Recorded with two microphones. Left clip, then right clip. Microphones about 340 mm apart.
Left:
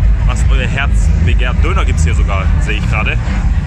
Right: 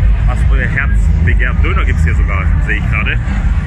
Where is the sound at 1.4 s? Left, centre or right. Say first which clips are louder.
Left 1 dB; centre.